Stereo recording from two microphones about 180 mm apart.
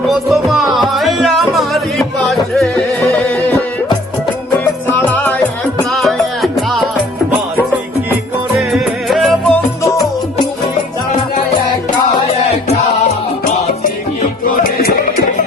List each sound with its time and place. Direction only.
0.1 s music: centre (ahead or behind)
4.9 s music: 10° left (ahead or behind)
8.7 s music: centre (ahead or behind)
14.6 s music: 55° left (ahead or behind)